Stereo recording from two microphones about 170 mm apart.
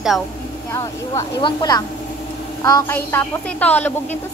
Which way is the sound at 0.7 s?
20° left (ahead or behind).